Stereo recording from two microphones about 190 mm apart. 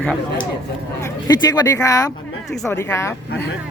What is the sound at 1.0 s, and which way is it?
Speech, 15° left (ahead or behind).